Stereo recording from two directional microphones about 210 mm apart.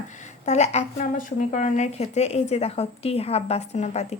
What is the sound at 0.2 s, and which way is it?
A woman's voice, 35° left (ahead or behind).